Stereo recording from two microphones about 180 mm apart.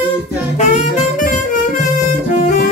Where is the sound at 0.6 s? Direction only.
40° left (ahead or behind).